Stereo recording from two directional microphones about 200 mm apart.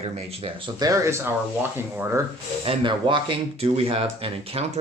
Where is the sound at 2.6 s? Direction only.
25° right (ahead or behind).